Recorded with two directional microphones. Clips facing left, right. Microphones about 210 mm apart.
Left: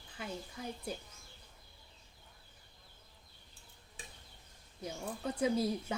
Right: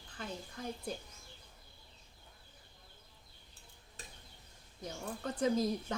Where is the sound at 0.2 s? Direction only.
10° left (ahead or behind).